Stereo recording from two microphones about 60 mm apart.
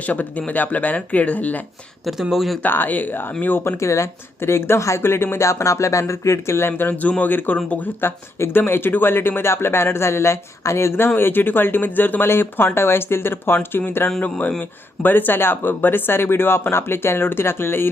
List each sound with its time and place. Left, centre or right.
0.0 s speech: left
2.3 s speech: centre
2.6 s speech: left
8.0 s speech: left
14.2 s speech: left